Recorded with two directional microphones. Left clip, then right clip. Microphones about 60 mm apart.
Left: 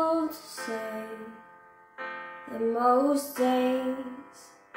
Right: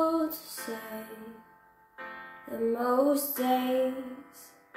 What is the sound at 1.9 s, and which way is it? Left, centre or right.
Music, centre.